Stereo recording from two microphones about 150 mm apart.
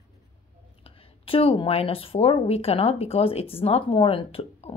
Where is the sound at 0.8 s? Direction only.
40° left (ahead or behind).